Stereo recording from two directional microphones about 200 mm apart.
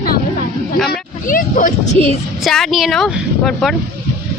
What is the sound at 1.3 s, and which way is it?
Speech, 40° left (ahead or behind).